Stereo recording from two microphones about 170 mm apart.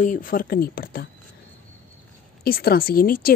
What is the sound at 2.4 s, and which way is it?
Speech, 60° left (ahead or behind).